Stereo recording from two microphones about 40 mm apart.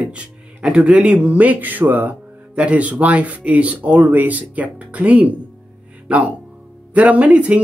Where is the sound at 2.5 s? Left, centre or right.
Right.